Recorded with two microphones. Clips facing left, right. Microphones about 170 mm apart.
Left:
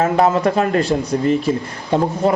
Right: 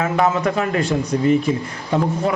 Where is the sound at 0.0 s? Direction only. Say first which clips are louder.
Left 3 dB; 35° left (ahead or behind).